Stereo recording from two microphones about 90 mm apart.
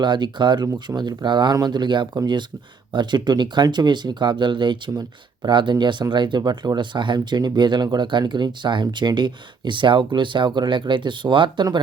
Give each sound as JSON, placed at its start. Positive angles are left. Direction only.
{"t": 0.0, "sound": "speech", "side_deg": -55}